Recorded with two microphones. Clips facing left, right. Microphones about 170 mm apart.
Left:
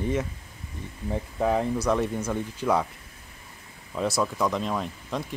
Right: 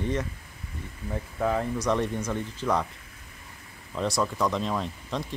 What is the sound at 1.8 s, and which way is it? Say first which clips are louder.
Speech: left 1 dB; 5° left (ahead or behind).